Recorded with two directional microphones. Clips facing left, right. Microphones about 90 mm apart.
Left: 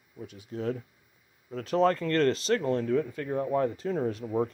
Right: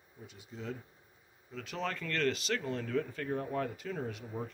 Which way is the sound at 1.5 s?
40° left (ahead or behind).